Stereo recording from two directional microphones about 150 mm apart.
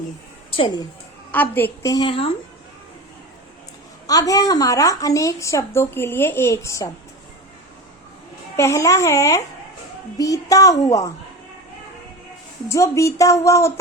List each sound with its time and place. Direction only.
0.5 s speech: 30° left (ahead or behind)
1.3 s a woman's voice: 10° left (ahead or behind)
1.9 s speech: 30° left (ahead or behind)
4.0 s a woman's voice: 25° left (ahead or behind)
8.5 s a woman's voice: 20° left (ahead or behind)
12.6 s a woman's voice: 20° left (ahead or behind)